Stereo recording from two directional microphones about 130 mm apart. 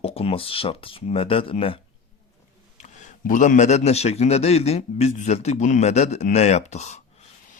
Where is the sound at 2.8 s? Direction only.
75° left (ahead or behind).